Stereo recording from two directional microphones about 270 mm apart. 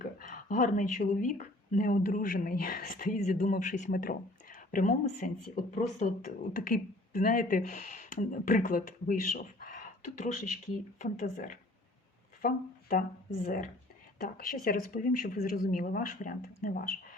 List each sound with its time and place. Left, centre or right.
0.0 s speech: left